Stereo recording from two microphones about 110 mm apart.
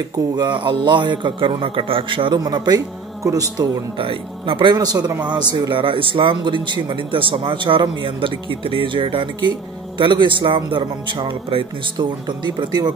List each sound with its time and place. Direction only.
0.4 s a man's voice: 45° right (ahead or behind)
2.3 s speech: 35° right (ahead or behind)
4.0 s a man's voice: 50° right (ahead or behind)